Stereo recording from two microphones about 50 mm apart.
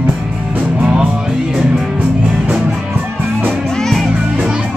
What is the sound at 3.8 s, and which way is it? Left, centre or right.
Music, centre.